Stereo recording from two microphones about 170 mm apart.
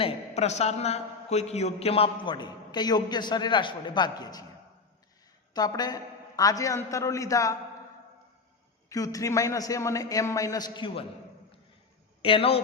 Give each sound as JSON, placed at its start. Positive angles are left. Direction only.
{"t": 0.0, "sound": "a man's voice", "side_deg": 40}
{"t": 5.5, "sound": "a man's voice", "side_deg": 25}
{"t": 8.9, "sound": "a man's voice", "side_deg": 20}
{"t": 12.2, "sound": "speech", "side_deg": 35}